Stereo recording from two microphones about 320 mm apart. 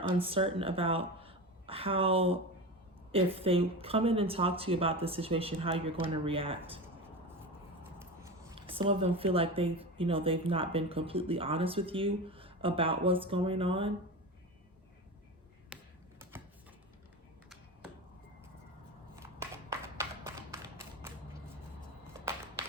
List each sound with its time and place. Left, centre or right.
0.2 s a woman's voice: centre
7.9 s speech: centre
15.7 s computer keyboard: centre
20.0 s clapping: centre